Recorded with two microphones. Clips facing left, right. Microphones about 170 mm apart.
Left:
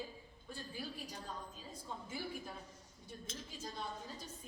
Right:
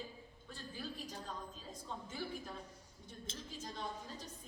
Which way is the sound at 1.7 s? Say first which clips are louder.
Left 2 dB; 10° left (ahead or behind).